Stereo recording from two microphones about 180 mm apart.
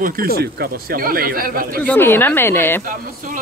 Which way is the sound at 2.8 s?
45° right (ahead or behind).